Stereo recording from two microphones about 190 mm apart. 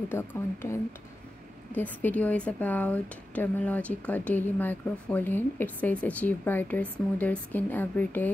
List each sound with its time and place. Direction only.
0.1 s speech: 10° left (ahead or behind)
1.8 s speech: 10° left (ahead or behind)